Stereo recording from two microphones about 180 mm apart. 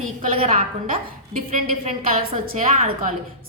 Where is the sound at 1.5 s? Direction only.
35° right (ahead or behind).